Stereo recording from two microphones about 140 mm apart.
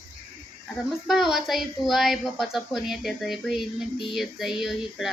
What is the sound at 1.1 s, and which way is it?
A woman's voice, 5° right (ahead or behind).